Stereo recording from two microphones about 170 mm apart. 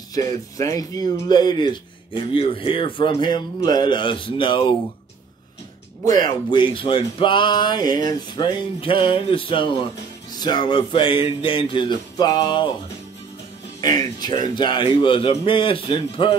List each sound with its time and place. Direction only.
0.1 s speech: 20° left (ahead or behind)
6.2 s a man's voice: 25° left (ahead or behind)
13.7 s a man's voice: 25° left (ahead or behind)